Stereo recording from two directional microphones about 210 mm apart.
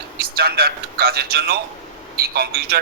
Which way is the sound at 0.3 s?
50° right (ahead or behind).